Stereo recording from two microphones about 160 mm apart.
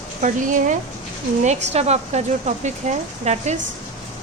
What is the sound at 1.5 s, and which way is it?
Speech, 45° right (ahead or behind).